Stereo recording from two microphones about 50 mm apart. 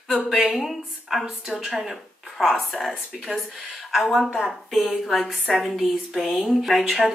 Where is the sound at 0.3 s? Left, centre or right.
Centre.